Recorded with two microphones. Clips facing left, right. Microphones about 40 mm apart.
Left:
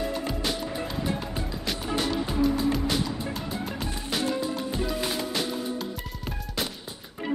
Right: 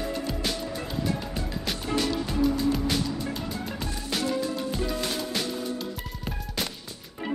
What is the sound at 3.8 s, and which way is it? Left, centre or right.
Music, centre.